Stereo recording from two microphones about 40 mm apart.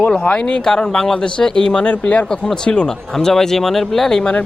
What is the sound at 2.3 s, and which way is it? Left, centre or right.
Speech, centre.